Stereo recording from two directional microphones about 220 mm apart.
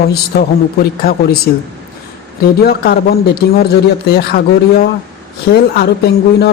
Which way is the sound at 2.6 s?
45° left (ahead or behind).